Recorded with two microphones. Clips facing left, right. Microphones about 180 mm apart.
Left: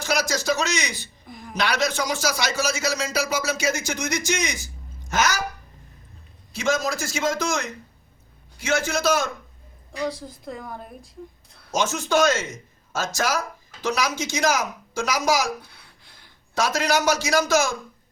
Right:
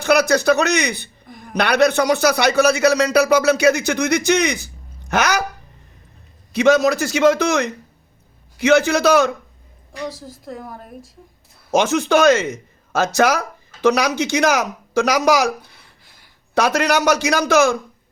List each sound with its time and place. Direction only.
0.0 s speech: 60° right (ahead or behind)
6.5 s a man's voice: 65° right (ahead or behind)
9.9 s speech: centre (ahead or behind)
11.7 s speech: 60° right (ahead or behind)
16.6 s speech: 65° right (ahead or behind)